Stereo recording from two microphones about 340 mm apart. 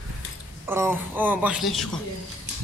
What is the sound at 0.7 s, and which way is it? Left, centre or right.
Speech, centre.